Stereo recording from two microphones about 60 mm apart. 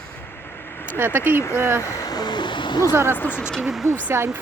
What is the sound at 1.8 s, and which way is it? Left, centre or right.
Vehicle, left.